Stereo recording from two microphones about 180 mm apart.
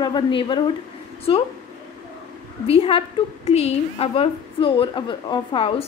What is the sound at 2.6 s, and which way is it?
A woman's voice, 30° left (ahead or behind).